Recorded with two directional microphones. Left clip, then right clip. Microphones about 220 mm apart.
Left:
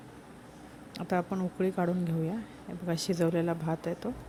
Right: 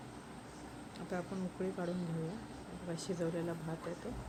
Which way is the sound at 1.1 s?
45° left (ahead or behind).